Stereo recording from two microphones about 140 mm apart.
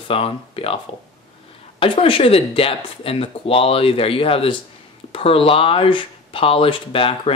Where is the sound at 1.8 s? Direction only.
40° left (ahead or behind).